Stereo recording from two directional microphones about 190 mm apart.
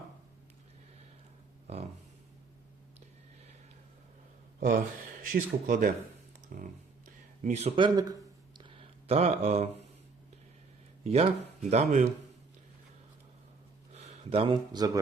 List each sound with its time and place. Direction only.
1.6 s a sound: 35° right (ahead or behind)
4.6 s speech: 45° right (ahead or behind)
7.4 s speech: 35° right (ahead or behind)
11.0 s speech: 35° right (ahead or behind)
13.9 s speech: 35° right (ahead or behind)